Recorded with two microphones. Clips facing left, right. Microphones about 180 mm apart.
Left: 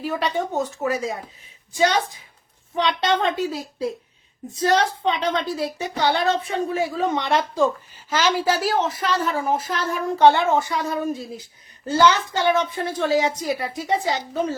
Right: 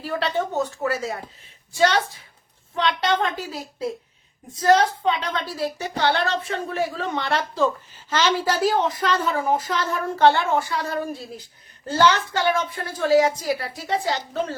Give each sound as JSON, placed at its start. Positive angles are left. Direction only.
{"t": 0.0, "sound": "a woman's voice", "side_deg": 15}
{"t": 5.0, "sound": "a woman's voice", "side_deg": 20}
{"t": 12.4, "sound": "a woman's voice", "side_deg": 25}